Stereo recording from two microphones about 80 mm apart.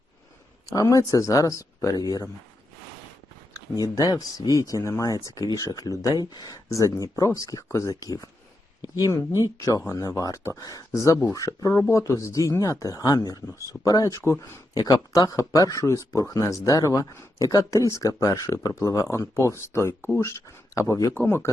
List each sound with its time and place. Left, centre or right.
0.7 s speech: left
3.5 s speech: left
9.4 s speech: left
14.7 s speech: left
20.7 s speech: left
21.1 s a man's voice: left